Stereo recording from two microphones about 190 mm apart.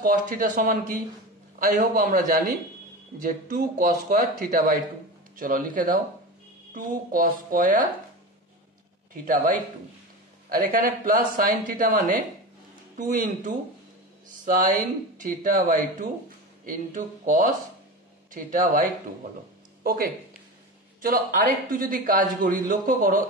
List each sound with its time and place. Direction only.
0.0 s a man's voice: 45° right (ahead or behind)
9.1 s a man's voice: 45° right (ahead or behind)
10.5 s a man's voice: 50° right (ahead or behind)